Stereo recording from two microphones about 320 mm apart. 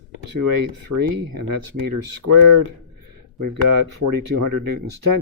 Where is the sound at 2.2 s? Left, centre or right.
Right.